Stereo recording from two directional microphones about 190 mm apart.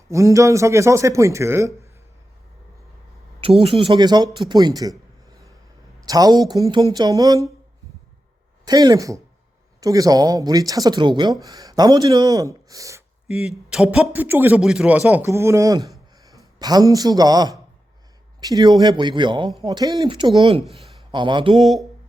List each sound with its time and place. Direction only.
0.1 s a man's voice: 15° right (ahead or behind)
3.4 s speech: 30° right (ahead or behind)
6.1 s speech: 20° right (ahead or behind)
8.6 s speech: 20° right (ahead or behind)
13.2 s a man's voice: 5° right (ahead or behind); by 21.6 s 25° right (ahead or behind)
21.6 s speech: centre (ahead or behind)